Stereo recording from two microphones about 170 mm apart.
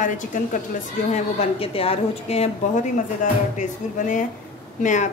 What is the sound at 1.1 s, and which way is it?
Speech, 35° left (ahead or behind).